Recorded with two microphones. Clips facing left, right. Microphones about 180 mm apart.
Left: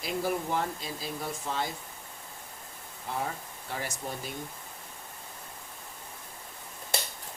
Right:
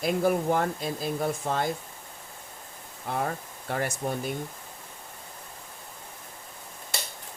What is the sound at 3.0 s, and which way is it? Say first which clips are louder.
Speech: right 4 dB; 55° right (ahead or behind).